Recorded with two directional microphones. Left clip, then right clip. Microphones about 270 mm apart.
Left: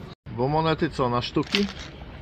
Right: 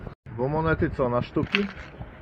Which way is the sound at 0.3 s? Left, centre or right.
Centre.